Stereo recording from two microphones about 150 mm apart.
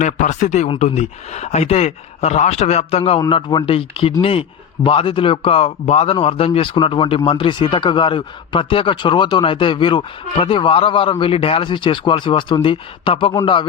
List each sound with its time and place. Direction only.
0.0 s speech: 50° left (ahead or behind)
3.2 s speech: 30° left (ahead or behind)